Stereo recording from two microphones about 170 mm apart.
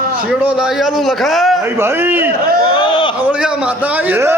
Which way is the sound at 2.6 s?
25° left (ahead or behind).